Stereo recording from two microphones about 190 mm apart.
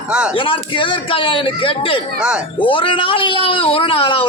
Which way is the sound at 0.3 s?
25° left (ahead or behind).